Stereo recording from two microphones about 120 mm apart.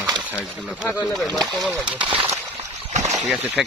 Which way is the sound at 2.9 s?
80° right.